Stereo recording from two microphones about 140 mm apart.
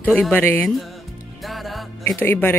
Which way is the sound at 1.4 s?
Centre (ahead or behind).